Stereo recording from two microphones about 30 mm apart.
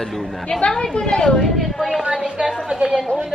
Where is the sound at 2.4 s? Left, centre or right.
Right.